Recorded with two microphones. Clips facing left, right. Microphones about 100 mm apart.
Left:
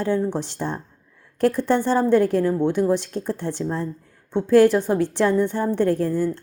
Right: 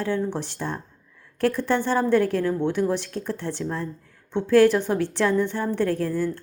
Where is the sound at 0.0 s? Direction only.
15° left (ahead or behind).